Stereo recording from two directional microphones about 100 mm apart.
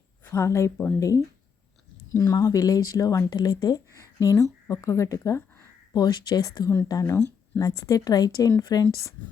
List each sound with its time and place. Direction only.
0.3 s a woman's voice: 30° left (ahead or behind)
5.9 s speech: 45° left (ahead or behind)